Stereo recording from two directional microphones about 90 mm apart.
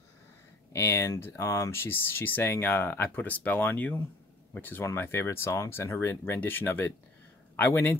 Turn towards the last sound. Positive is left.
turn(degrees=25)  # may be behind; listen again after turning